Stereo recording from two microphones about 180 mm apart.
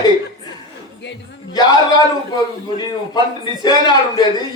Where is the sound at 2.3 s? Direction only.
25° left (ahead or behind).